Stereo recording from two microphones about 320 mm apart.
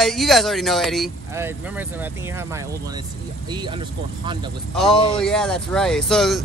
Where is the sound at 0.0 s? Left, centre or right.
Centre.